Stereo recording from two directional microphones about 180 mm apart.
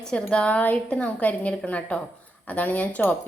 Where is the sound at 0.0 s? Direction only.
5° left (ahead or behind).